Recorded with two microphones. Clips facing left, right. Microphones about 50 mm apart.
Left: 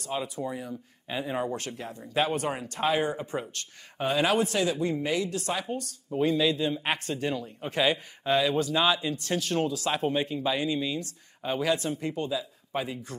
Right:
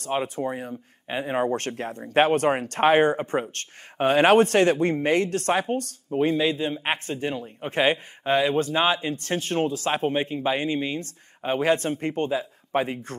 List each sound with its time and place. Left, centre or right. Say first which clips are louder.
0.0 s speech: right 6 dB; right
6.1 s a man's voice: right 3 dB; right